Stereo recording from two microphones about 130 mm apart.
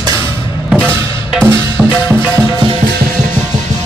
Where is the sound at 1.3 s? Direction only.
5° right (ahead or behind).